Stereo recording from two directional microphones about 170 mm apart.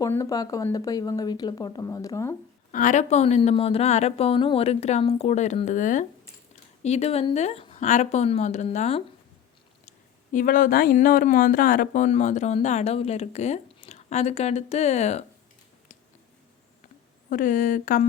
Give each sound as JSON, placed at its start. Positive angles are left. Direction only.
{"t": 0.0, "sound": "speech", "side_deg": 20}
{"t": 2.7, "sound": "speech", "side_deg": 45}
{"t": 7.8, "sound": "speech", "side_deg": 45}
{"t": 10.3, "sound": "speech", "side_deg": 55}
{"t": 17.2, "sound": "speech", "side_deg": 50}